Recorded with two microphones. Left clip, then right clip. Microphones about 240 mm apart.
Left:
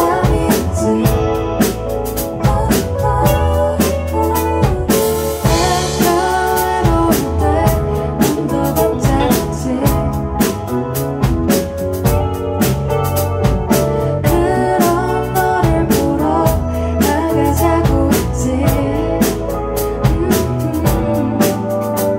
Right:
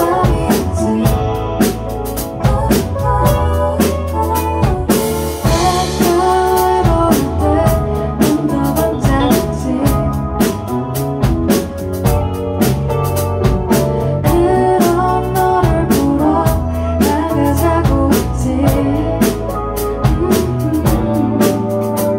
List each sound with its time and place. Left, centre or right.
14.3 s music: left